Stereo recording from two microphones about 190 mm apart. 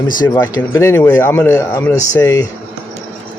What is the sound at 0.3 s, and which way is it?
Speech, 20° left (ahead or behind).